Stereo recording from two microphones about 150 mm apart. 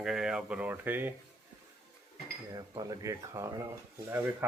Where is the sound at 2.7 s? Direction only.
25° right (ahead or behind).